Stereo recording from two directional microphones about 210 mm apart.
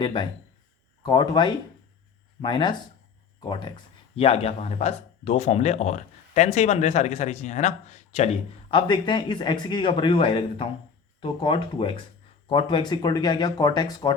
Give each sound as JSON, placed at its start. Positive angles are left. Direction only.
{"t": 0.0, "sound": "speech", "side_deg": 20}